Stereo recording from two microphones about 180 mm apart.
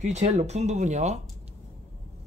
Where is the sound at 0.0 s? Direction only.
40° right (ahead or behind).